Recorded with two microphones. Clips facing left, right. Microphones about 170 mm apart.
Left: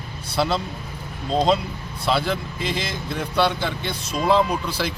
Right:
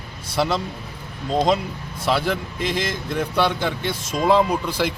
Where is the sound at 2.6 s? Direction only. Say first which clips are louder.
Right 3 dB; 50° right (ahead or behind).